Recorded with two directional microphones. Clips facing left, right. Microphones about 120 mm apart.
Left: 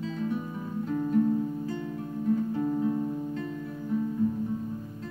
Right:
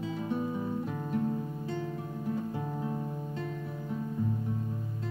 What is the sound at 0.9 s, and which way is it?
Music, 10° right (ahead or behind).